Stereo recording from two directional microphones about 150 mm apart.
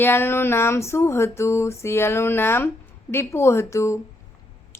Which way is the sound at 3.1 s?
15° left (ahead or behind).